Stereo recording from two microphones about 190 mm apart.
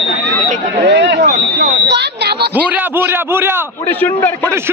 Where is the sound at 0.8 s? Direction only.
70° right (ahead or behind).